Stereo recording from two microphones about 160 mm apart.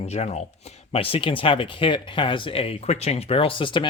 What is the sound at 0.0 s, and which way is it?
Speech, 40° left (ahead or behind).